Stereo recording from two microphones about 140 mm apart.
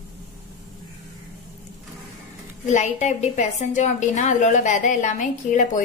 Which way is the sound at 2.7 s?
55° left (ahead or behind).